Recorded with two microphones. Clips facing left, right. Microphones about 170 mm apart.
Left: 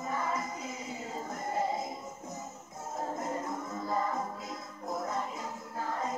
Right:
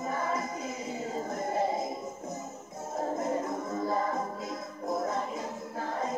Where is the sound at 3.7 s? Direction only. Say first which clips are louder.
Right 6 dB; 45° right (ahead or behind).